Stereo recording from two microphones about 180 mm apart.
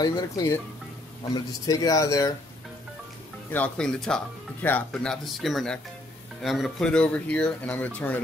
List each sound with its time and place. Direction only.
0.0 s speech: 20° left (ahead or behind)
3.5 s speech: 5° left (ahead or behind)